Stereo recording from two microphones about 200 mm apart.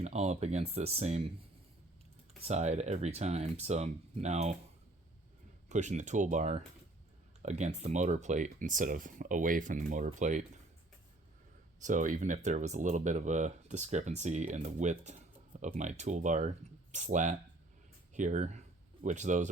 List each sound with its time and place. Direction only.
0.0 s speech: 35° right (ahead or behind)
2.5 s speech: 35° right (ahead or behind)
5.6 s speech: 35° right (ahead or behind)
11.8 s speech: 40° right (ahead or behind)